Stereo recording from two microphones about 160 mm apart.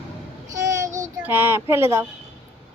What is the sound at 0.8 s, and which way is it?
Child singing, 50° right (ahead or behind).